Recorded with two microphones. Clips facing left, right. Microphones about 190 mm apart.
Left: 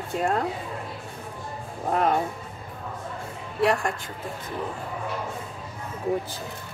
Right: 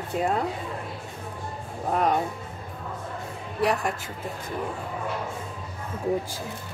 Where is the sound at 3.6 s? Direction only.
Centre (ahead or behind).